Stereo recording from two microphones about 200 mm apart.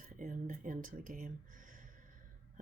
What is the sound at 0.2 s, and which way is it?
Speech, 40° right (ahead or behind).